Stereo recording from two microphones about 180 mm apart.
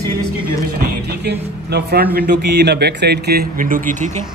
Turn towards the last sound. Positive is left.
turn(degrees=-45)  # may be behind; listen again after turning